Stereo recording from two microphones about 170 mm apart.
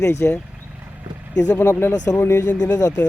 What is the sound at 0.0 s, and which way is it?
Speech, 15° left (ahead or behind).